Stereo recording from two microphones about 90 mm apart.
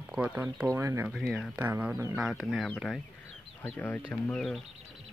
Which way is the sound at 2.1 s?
5° right (ahead or behind).